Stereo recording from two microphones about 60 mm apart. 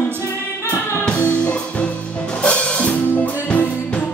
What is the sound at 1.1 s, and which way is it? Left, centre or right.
Music, left.